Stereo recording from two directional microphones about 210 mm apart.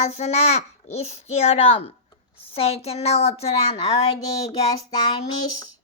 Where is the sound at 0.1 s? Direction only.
30° left (ahead or behind).